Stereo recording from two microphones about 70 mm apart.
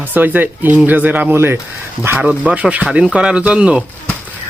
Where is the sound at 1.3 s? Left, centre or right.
Right.